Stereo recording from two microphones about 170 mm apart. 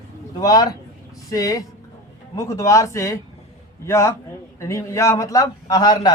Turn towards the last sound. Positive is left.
turn(degrees=25)  # may be behind; listen again after turning